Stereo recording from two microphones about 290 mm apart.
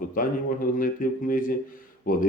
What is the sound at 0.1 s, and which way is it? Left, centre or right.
Speech, left.